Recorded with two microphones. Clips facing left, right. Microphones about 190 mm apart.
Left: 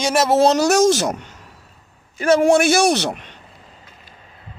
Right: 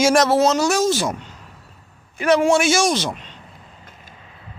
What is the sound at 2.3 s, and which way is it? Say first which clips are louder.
Speech: left 4 dB; 55° left (ahead or behind).